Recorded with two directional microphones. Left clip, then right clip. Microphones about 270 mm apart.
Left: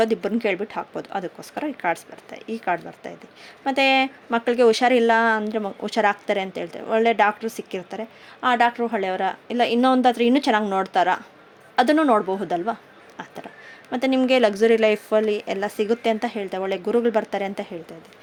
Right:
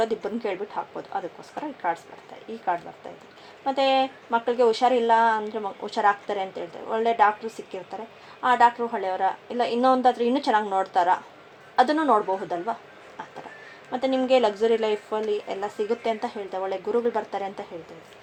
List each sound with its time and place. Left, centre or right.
0.0 s speech: left
13.9 s speech: left